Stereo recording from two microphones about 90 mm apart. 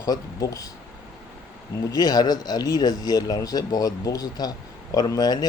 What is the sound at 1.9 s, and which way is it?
Speech, 50° left (ahead or behind).